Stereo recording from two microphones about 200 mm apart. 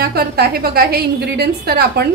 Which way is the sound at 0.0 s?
50° right (ahead or behind).